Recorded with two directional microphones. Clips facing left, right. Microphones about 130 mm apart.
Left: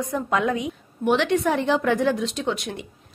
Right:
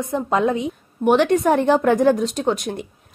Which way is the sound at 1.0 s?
45° right (ahead or behind).